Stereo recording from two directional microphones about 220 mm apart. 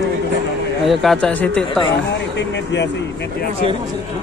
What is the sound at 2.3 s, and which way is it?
Speech, 50° left (ahead or behind).